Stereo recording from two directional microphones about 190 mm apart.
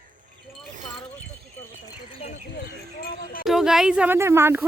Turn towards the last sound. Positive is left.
turn(degrees=-15)  # may be behind; listen again after turning